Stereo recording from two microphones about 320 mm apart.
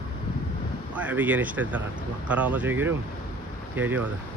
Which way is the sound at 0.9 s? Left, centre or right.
Centre.